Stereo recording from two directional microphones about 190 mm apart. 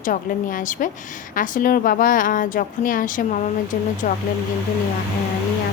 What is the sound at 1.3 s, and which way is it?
A woman's voice, 45° left (ahead or behind).